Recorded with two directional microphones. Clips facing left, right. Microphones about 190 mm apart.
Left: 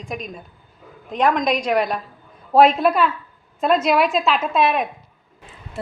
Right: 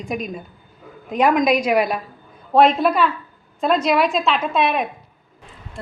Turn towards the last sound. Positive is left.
turn(degrees=0)  # may be behind; listen again after turning